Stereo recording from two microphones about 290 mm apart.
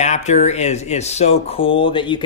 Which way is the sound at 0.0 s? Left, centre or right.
Left.